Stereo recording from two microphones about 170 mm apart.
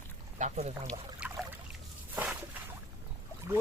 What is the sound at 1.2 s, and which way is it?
Boat, 5° right (ahead or behind).